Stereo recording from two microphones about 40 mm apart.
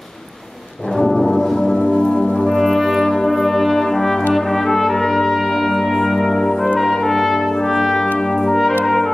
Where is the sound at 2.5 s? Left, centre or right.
Centre.